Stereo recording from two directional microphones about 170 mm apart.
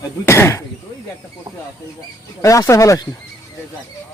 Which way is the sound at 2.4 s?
20° left (ahead or behind).